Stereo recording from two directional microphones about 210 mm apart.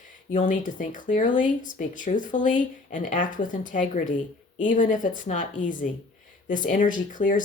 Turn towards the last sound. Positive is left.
turn(degrees=40)  # may be behind; listen again after turning